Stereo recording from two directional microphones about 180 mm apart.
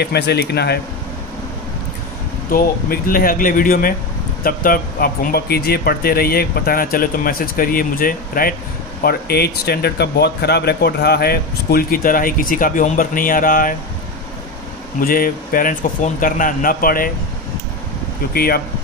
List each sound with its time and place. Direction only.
0.0 s speech: 65° left (ahead or behind)
2.5 s speech: 50° left (ahead or behind)
15.0 s speech: 55° left (ahead or behind)
18.3 s speech: 55° left (ahead or behind)